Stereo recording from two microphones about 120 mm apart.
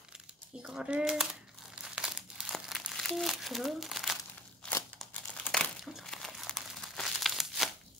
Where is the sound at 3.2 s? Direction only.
Centre (ahead or behind).